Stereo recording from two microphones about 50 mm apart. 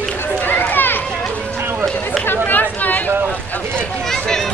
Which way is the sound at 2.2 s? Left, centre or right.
Left.